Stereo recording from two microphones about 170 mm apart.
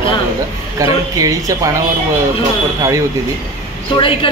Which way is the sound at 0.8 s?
20° right (ahead or behind).